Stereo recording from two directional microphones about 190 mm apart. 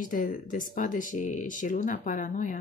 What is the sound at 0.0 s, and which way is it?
Speech, 45° left (ahead or behind).